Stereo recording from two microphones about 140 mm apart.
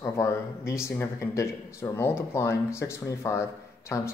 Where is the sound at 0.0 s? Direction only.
20° left (ahead or behind).